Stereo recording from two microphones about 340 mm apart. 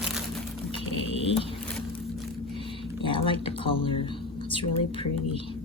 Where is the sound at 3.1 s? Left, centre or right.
Centre.